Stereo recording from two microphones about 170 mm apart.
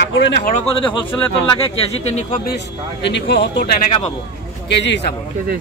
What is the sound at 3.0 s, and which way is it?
Speech, 90° left.